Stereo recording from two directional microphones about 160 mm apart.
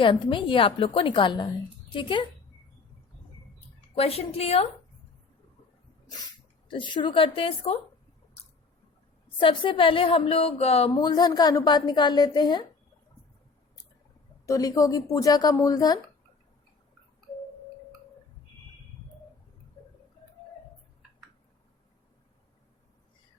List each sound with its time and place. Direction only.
0.0 s a woman's voice: 30° left (ahead or behind)
3.9 s a woman's voice: 40° left (ahead or behind)
6.7 s a woman's voice: 30° left (ahead or behind)
9.4 s a woman's voice: 30° left (ahead or behind)
10.9 s a woman's voice: 25° left (ahead or behind)
14.4 s a woman's voice: 20° left (ahead or behind)